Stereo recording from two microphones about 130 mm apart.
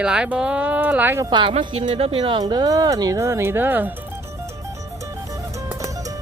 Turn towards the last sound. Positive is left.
turn(degrees=-25)  # may be behind; listen again after turning